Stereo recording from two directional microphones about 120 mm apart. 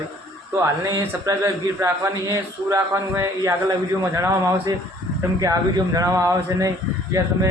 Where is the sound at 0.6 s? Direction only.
25° right (ahead or behind).